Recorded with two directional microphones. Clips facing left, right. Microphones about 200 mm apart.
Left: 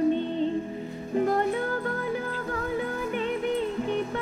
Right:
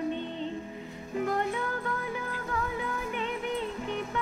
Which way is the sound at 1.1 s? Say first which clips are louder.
Left 5 dB; 35° left (ahead or behind).